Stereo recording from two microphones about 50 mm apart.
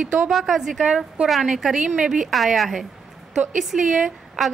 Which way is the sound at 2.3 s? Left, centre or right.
Centre.